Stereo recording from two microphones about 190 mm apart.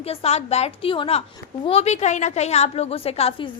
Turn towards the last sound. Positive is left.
turn(degrees=30)  # may be behind; listen again after turning